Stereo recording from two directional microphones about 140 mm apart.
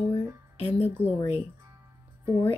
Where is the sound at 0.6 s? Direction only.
45° left (ahead or behind).